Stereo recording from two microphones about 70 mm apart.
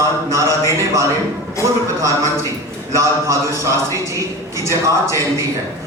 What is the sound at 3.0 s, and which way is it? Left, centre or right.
Speech, right.